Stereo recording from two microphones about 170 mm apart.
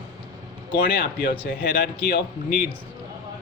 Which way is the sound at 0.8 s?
60° left (ahead or behind).